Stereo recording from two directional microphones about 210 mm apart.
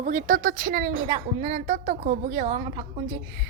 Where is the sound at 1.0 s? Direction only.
30° right (ahead or behind).